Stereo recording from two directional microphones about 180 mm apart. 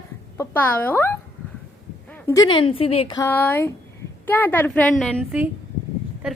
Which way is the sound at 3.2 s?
10° left (ahead or behind).